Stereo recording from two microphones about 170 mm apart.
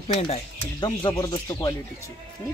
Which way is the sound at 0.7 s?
25° left (ahead or behind).